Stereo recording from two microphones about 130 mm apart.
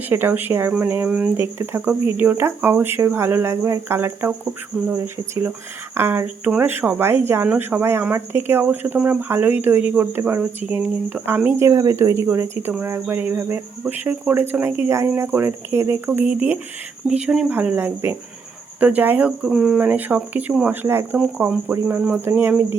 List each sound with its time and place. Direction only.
0.1 s speech: 15° right (ahead or behind)
11.6 s speech: 25° right (ahead or behind)